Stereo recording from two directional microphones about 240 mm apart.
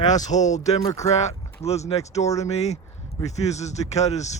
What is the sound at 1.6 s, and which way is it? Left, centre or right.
Speech, left.